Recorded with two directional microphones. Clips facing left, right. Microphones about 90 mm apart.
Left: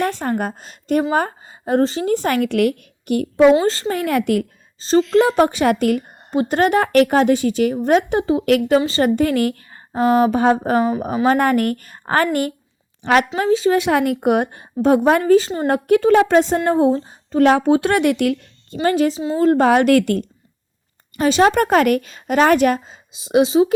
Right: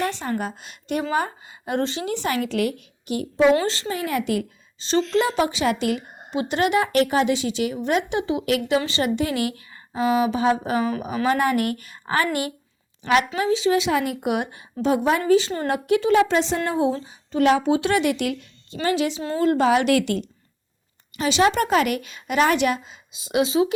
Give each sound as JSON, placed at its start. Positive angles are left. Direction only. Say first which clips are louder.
{"t": 0.0, "sound": "a woman's voice", "louder": "left 5 dB", "side_deg": 50}
{"t": 4.8, "sound": "a woman's voice", "louder": "left 6 dB", "side_deg": 40}